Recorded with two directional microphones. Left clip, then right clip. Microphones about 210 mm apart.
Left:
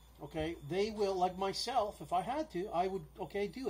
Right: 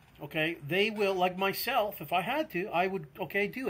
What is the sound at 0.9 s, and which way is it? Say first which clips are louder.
Speech: right 5 dB; 35° right (ahead or behind).